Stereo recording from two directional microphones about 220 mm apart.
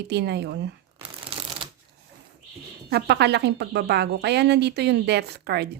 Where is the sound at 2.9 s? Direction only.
50° right (ahead or behind).